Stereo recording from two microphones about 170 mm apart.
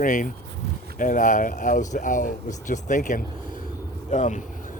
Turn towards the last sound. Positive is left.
turn(degrees=50)  # may be behind; listen again after turning